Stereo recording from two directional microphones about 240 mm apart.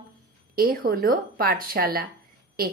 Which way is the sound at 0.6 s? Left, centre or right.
Right.